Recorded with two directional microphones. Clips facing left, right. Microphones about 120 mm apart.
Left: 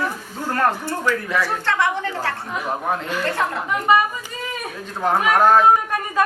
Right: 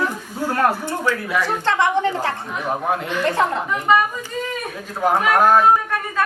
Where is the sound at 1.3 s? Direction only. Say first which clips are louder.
Right 1 dB; 15° right (ahead or behind).